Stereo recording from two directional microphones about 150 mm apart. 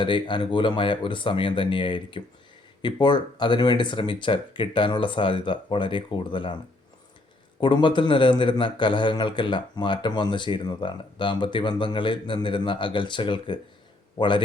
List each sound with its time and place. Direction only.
0.0 s a man's voice: 30° left (ahead or behind)
7.6 s a man's voice: 30° left (ahead or behind)